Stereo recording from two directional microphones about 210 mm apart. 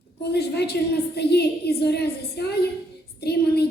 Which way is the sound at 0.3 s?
50° left (ahead or behind).